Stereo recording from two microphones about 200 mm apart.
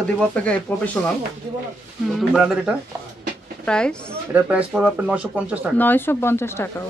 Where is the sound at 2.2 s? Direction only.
5° right (ahead or behind).